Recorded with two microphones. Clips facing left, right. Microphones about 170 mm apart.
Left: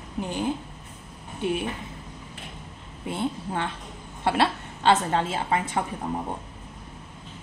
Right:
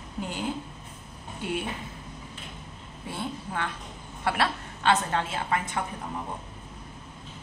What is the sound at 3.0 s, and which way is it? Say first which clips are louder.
A woman's voice: left 6 dB; 25° left (ahead or behind).